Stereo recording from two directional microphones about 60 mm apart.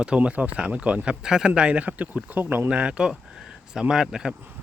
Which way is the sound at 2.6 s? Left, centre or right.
Centre.